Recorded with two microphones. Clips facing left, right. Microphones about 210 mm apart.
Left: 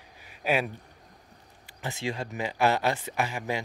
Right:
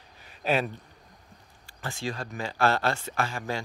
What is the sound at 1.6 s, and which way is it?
Speech, 20° left (ahead or behind).